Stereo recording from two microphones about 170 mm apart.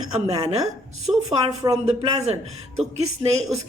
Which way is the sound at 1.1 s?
5° right (ahead or behind).